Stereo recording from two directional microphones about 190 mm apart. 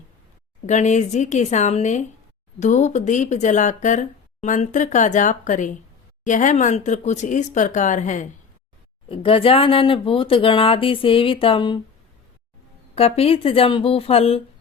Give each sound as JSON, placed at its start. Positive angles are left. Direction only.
{"t": 0.7, "sound": "speech", "side_deg": 40}
{"t": 9.0, "sound": "speech", "side_deg": 30}
{"t": 12.9, "sound": "speech", "side_deg": 30}